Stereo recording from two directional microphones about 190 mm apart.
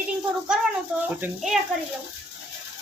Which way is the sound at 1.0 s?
10° right (ahead or behind).